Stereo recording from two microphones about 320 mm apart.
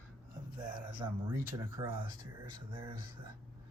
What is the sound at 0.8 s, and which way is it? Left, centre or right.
Speech, centre.